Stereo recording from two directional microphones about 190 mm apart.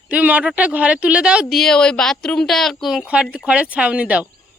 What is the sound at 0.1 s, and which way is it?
Speech, 10° right (ahead or behind).